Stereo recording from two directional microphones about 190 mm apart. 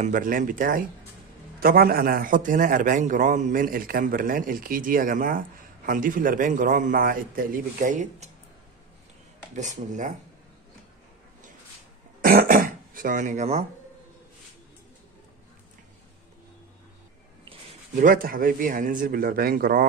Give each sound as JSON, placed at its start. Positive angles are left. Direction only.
{"t": 0.0, "sound": "a man's voice", "side_deg": -45}
{"t": 9.6, "sound": "speech", "side_deg": -40}
{"t": 12.2, "sound": "throat clearing", "side_deg": -50}
{"t": 17.9, "sound": "a man's voice", "side_deg": -45}